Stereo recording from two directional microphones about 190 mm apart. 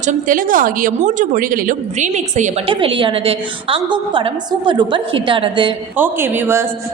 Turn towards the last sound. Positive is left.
turn(degrees=-10)  # may be behind; listen again after turning